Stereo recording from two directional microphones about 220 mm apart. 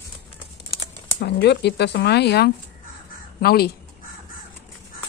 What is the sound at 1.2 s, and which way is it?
Speech, 50° left (ahead or behind).